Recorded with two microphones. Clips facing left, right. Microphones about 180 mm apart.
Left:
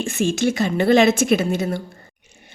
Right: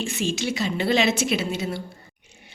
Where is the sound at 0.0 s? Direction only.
50° left (ahead or behind).